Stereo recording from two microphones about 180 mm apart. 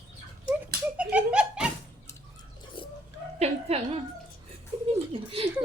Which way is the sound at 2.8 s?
25° left (ahead or behind).